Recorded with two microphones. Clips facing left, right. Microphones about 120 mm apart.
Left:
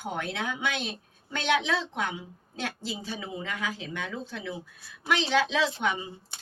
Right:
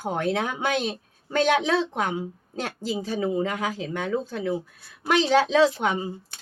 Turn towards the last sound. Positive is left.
turn(degrees=-40)  # may be behind; listen again after turning